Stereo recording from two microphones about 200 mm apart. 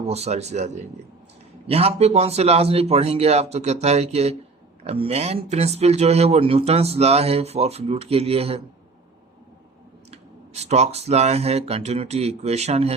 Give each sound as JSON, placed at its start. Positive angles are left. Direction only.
{"t": 0.1, "sound": "speech", "side_deg": -30}
{"t": 10.1, "sound": "speech", "side_deg": -35}